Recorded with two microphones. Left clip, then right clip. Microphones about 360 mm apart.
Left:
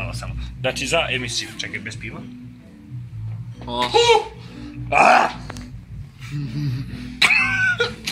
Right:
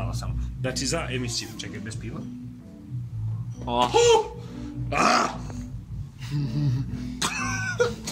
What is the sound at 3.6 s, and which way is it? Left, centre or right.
Speech, centre.